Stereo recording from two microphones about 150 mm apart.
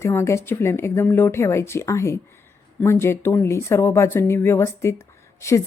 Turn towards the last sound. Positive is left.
turn(degrees=20)  # may be behind; listen again after turning